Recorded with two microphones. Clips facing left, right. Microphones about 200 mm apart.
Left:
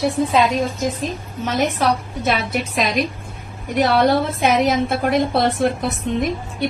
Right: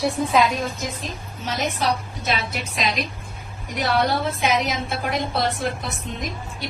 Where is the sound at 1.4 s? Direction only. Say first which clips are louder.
Left 5 dB; 55° left (ahead or behind).